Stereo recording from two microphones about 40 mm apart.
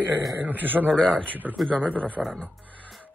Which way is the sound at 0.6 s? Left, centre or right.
Right.